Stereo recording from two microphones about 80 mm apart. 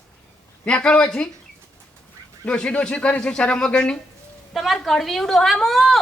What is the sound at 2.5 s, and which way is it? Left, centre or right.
A man's voice, centre.